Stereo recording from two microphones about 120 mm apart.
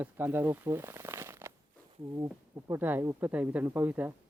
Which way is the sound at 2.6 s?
20° right (ahead or behind).